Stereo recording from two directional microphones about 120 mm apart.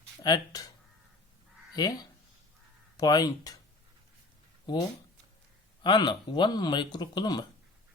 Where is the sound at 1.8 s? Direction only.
30° left (ahead or behind).